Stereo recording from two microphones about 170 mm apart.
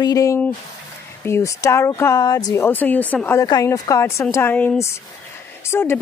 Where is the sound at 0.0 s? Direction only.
20° left (ahead or behind).